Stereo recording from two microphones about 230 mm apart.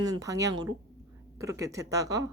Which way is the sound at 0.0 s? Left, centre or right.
Centre.